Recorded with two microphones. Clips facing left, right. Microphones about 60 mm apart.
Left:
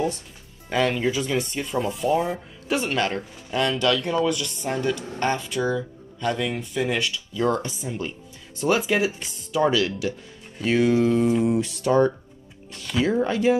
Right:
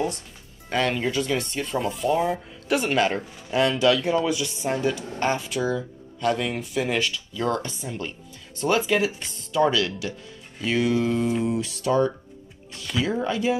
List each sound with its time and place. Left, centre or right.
0.7 s speech: centre
7.3 s speech: centre; by 13.6 s left